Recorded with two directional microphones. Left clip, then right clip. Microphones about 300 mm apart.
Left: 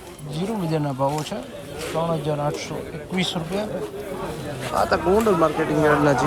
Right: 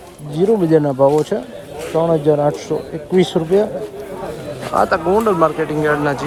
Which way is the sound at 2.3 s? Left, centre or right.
Right.